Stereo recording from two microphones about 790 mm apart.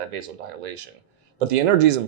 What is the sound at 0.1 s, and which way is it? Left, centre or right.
Speech, right.